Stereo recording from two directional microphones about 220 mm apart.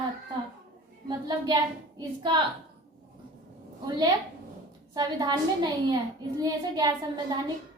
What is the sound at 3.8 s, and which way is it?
A woman's voice, 20° right (ahead or behind).